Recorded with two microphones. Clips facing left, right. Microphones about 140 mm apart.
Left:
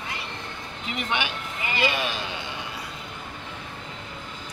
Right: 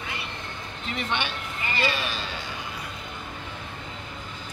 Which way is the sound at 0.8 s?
10° left (ahead or behind).